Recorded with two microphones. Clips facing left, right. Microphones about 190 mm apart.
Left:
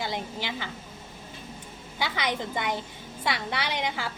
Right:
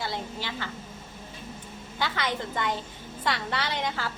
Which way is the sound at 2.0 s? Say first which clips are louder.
Even; 15° left (ahead or behind).